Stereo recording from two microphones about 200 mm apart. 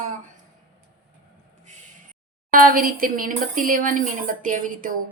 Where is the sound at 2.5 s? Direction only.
45° right (ahead or behind).